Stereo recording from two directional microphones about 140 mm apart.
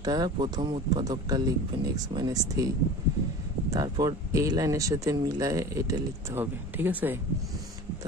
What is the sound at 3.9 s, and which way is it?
Speech, 25° right (ahead or behind).